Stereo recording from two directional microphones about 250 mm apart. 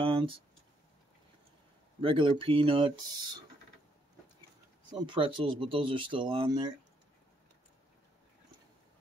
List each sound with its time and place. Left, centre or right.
0.0 s a sound: centre
2.0 s speech: right
4.9 s speech: centre